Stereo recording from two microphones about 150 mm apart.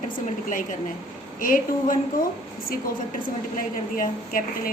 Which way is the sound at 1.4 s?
70° left (ahead or behind).